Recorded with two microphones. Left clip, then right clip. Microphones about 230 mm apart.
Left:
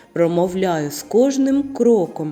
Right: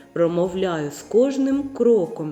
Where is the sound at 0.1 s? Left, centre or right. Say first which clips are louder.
Left 3 dB; left.